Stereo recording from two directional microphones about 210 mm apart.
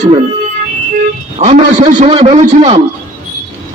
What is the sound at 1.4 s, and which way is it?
A man's voice, 35° right (ahead or behind).